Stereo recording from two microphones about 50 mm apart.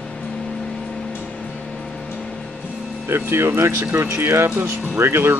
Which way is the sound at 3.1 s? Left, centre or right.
Right.